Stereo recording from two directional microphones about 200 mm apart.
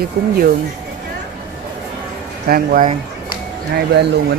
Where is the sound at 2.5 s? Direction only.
45° right (ahead or behind).